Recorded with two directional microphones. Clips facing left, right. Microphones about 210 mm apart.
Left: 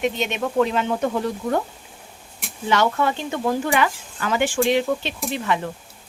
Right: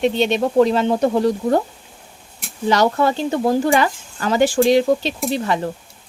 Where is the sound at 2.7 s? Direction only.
35° right (ahead or behind).